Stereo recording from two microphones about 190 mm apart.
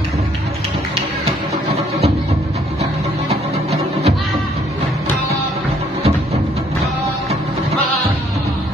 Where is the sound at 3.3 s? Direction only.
35° right (ahead or behind).